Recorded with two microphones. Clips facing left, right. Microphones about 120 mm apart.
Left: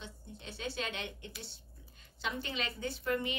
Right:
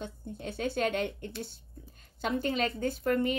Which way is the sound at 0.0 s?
50° right (ahead or behind).